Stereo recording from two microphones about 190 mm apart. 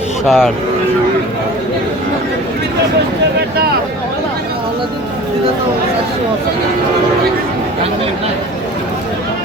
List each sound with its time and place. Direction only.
0.3 s speech: centre (ahead or behind)